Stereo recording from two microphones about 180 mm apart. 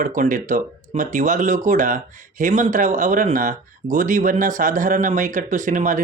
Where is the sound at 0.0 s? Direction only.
45° right (ahead or behind).